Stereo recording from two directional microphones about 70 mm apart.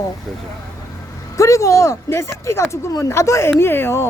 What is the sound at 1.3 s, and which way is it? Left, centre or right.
A woman's voice, left.